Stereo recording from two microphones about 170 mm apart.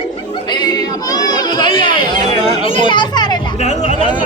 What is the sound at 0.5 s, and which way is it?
Chatter, 25° left (ahead or behind).